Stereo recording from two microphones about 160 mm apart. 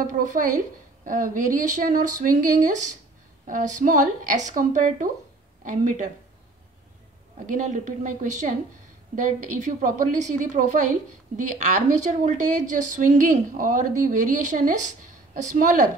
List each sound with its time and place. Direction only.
0.0 s a woman's voice: 50° right (ahead or behind)
7.4 s a woman's voice: 50° right (ahead or behind)